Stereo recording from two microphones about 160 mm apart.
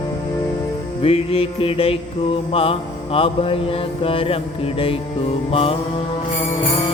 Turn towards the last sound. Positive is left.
turn(degrees=35)  # may be behind; listen again after turning